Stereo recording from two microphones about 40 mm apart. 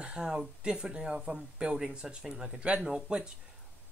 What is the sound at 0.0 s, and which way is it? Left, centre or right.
Speech, right.